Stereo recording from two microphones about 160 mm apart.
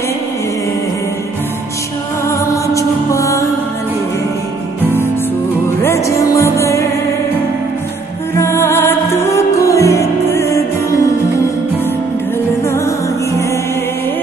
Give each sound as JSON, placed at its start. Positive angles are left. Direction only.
{"t": 2.2, "sound": "music", "side_deg": 20}
{"t": 6.0, "sound": "music", "side_deg": 20}
{"t": 8.4, "sound": "music", "side_deg": 15}